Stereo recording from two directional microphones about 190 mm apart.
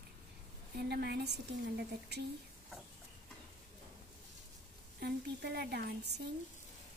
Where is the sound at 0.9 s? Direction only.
60° right (ahead or behind).